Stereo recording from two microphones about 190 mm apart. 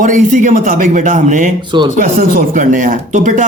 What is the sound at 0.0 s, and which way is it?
Speech, 45° right (ahead or behind).